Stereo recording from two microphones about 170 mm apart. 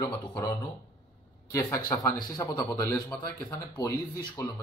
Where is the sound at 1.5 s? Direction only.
15° left (ahead or behind).